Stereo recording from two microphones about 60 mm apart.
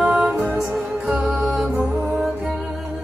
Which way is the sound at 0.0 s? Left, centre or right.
Centre.